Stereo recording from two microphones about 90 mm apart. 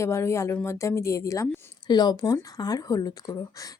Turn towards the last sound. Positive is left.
turn(degrees=45)  # may be behind; listen again after turning